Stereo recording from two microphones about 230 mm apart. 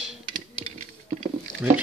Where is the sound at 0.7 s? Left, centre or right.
Right.